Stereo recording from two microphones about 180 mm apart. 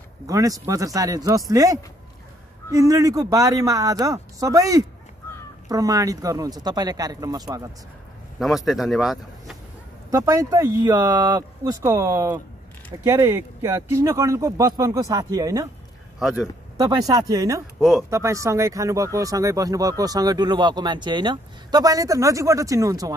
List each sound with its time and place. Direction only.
0.3 s speech: 20° right (ahead or behind)
8.4 s speech: centre (ahead or behind)
10.1 s speech: 20° right (ahead or behind)
16.2 s speech: 5° right (ahead or behind)
16.7 s speech: 20° right (ahead or behind)
17.7 s speech: centre (ahead or behind)
18.1 s speech: 15° right (ahead or behind)